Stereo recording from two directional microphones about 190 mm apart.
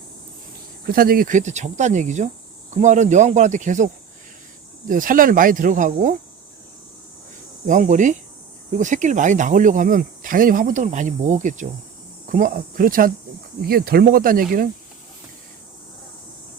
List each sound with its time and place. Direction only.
0.9 s speech: 50° right (ahead or behind)
4.9 s speech: 45° right (ahead or behind)
7.7 s speech: 40° right (ahead or behind)